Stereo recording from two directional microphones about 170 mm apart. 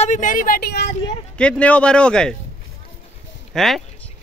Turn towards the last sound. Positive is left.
turn(degrees=0)  # may be behind; listen again after turning